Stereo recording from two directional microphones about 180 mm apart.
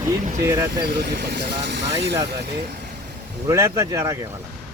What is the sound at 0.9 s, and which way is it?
Speech, 70° right (ahead or behind).